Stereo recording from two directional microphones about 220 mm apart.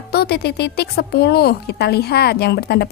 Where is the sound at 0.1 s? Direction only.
45° left (ahead or behind).